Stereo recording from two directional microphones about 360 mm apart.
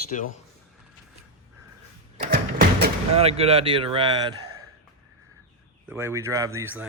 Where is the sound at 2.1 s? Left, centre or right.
Right.